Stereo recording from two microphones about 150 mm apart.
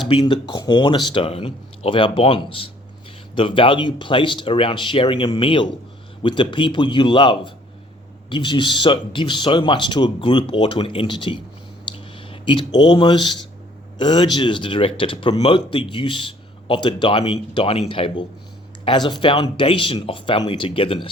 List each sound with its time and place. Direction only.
0.1 s speech: 35° left (ahead or behind)
11.9 s a sound: 35° left (ahead or behind)
14.0 s speech: 30° left (ahead or behind)